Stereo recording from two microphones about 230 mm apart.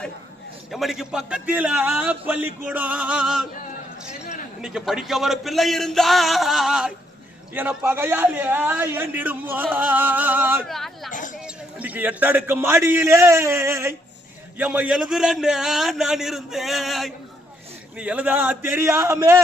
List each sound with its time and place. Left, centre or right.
0.7 s a man's voice: centre
4.6 s a man's voice: centre
11.1 s a sound: left
11.3 s a man's voice: centre